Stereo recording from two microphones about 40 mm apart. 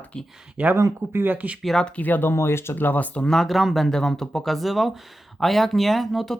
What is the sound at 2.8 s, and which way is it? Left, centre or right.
Speech, left.